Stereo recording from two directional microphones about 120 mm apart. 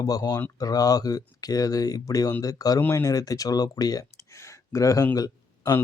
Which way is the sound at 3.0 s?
30° left (ahead or behind).